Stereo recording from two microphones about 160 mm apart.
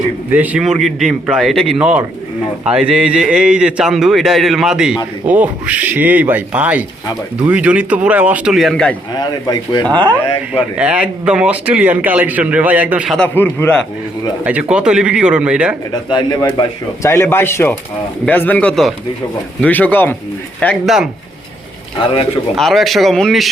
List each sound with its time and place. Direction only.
0.3 s a man's voice: 10° right (ahead or behind)
9.1 s speech: 25° left (ahead or behind)
10.5 s speech: 5° right (ahead or behind)
13.1 s speech: 10° left (ahead or behind)
14.4 s speech: 5° right (ahead or behind)
16.1 s speech: 30° left (ahead or behind)
17.0 s speech: 15° left (ahead or behind)
20.8 s a man's voice: 5° right (ahead or behind)
22.5 s a man's voice: centre (ahead or behind)